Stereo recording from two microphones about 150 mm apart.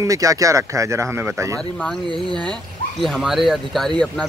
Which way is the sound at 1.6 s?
5° left (ahead or behind).